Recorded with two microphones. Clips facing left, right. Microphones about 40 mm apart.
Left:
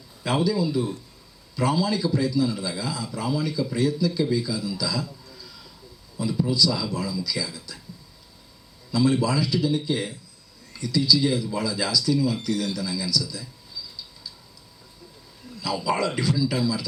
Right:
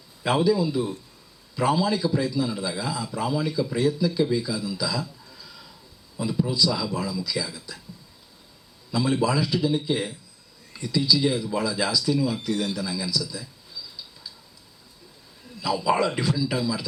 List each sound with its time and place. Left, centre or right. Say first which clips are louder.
0.2 s speech: right 2 dB; centre
8.9 s speech: left 1 dB; centre
15.6 s speech: right 2 dB; centre